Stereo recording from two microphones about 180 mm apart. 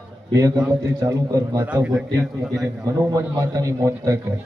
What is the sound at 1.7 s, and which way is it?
A man's voice, 5° right (ahead or behind).